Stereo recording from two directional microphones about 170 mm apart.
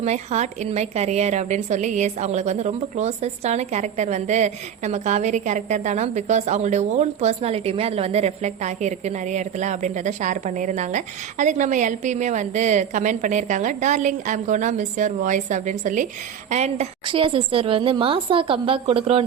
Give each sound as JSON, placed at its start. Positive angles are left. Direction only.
{"t": 0.0, "sound": "a woman's voice", "side_deg": -40}